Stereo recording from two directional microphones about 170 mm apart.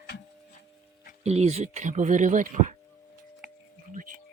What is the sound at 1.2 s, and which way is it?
Speech, 40° right (ahead or behind).